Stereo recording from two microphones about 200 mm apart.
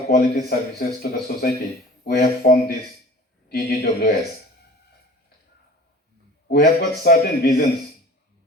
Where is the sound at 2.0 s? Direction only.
50° left (ahead or behind).